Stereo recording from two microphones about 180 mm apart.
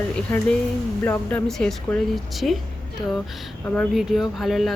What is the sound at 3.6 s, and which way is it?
Speech, 5° left (ahead or behind).